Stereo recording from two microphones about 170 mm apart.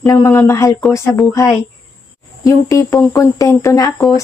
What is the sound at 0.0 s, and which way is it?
Speech, 15° left (ahead or behind).